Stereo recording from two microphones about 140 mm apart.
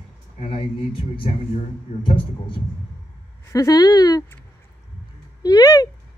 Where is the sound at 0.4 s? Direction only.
40° left (ahead or behind).